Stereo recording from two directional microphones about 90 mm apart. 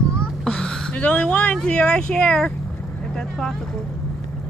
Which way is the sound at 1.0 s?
15° left (ahead or behind).